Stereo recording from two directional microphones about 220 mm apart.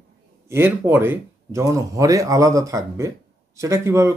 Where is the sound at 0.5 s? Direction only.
10° right (ahead or behind).